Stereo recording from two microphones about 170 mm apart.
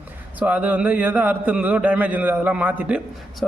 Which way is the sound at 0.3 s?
10° right (ahead or behind).